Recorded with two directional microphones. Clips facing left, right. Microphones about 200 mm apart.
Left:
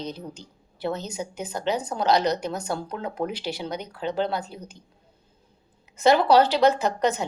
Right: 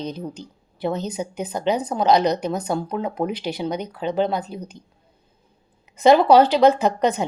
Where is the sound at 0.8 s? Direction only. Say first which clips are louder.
Right 4 dB; 20° right (ahead or behind).